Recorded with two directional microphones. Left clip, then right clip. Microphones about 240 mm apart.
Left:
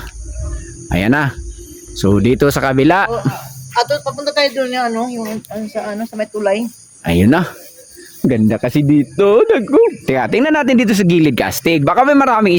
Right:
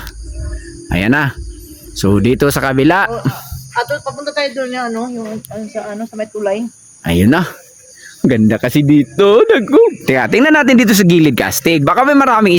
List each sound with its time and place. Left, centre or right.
0.9 s speech: centre
3.8 s speech: left
7.0 s speech: centre
8.3 s speech: centre